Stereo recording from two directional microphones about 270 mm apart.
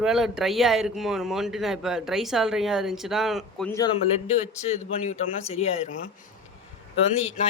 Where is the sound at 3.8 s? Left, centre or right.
Left.